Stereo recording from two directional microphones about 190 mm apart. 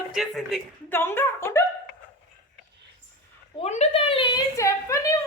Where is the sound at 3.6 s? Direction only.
35° left (ahead or behind); by 5.2 s 15° left (ahead or behind).